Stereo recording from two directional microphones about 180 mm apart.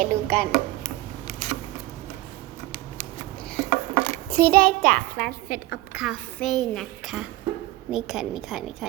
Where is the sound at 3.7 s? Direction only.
40° right (ahead or behind).